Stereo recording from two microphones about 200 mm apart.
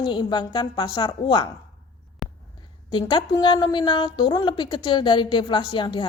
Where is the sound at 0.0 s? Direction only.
20° left (ahead or behind).